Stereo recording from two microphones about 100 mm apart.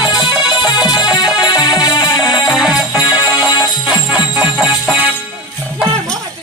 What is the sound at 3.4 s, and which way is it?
Music, 40° left (ahead or behind).